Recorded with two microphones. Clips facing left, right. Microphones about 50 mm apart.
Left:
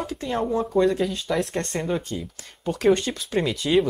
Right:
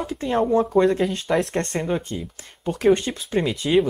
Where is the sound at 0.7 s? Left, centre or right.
Right.